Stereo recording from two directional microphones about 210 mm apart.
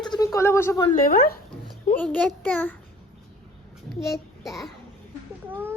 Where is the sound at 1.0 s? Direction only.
45° left (ahead or behind).